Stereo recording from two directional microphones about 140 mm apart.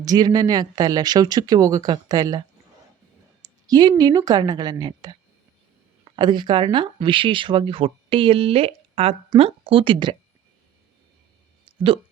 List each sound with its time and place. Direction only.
0.0 s speech: 30° right (ahead or behind)
3.7 s speech: 30° right (ahead or behind)
6.1 s speech: 35° right (ahead or behind)
11.6 s a sound: 40° right (ahead or behind)